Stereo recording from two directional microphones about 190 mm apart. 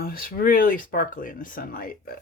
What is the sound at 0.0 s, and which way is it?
Speech, 50° left (ahead or behind).